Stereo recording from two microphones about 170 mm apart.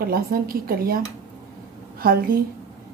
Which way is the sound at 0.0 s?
60° right (ahead or behind).